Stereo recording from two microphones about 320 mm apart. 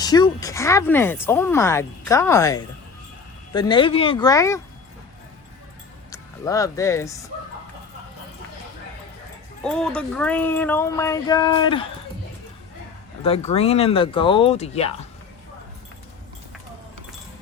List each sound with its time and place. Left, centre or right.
0.0 s speech: centre
6.1 s speech: centre
9.6 s speech: centre
13.2 s speech: centre